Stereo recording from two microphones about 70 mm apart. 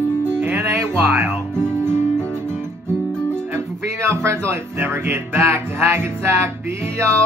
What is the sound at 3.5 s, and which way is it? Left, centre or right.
Music, right.